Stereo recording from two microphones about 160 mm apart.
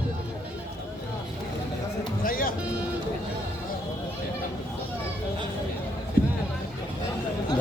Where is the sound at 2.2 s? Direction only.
65° left (ahead or behind).